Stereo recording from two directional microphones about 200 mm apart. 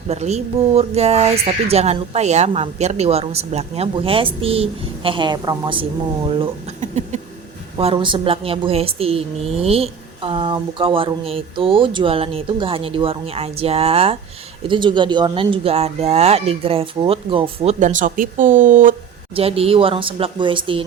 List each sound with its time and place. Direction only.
0.1 s a woman's voice: 35° right (ahead or behind)
19.3 s a woman's voice: 30° right (ahead or behind)